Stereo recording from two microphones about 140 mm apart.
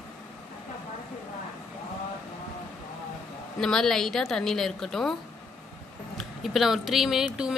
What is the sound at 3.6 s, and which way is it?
Speech, 5° left (ahead or behind).